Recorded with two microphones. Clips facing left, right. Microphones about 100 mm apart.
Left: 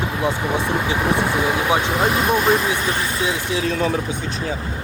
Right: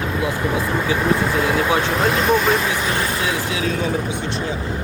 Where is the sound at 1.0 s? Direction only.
15° left (ahead or behind).